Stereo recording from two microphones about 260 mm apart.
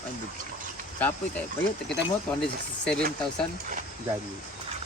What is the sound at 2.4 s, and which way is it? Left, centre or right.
Speech, centre.